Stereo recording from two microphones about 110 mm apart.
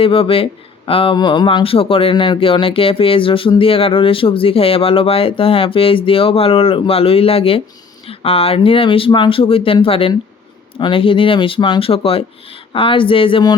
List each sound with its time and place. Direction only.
0.0 s speech: 55° left (ahead or behind)
1.1 s speech: 40° left (ahead or behind)
1.5 s speech: 55° left (ahead or behind)